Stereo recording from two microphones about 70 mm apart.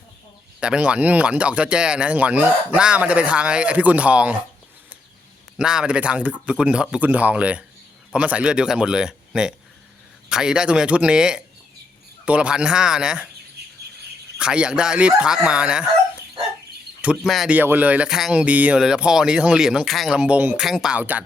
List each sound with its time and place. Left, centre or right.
0.6 s speech: centre
5.5 s speech: centre
14.3 s speech: centre
17.2 s speech: centre
17.5 s speech: right
18.1 s speech: centre
18.4 s speech: right
18.8 s speech: centre
20.1 s speech: centre
20.6 s speech: centre
20.9 s speech: right